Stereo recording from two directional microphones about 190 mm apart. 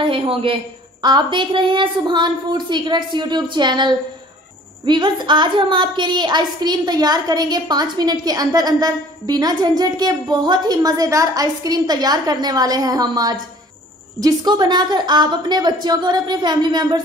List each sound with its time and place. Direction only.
0.0 s a man's voice: 30° right (ahead or behind)